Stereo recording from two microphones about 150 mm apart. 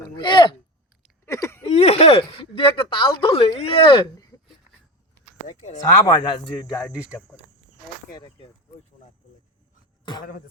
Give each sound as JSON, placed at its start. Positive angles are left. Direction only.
{"t": 0.2, "sound": "speech", "side_deg": 30}
{"t": 1.2, "sound": "a sound", "side_deg": 20}
{"t": 1.7, "sound": "speech", "side_deg": 45}
{"t": 5.5, "sound": "speech", "side_deg": 55}
{"t": 5.9, "sound": "a man's voice", "side_deg": 25}
{"t": 8.1, "sound": "a man's voice", "side_deg": 30}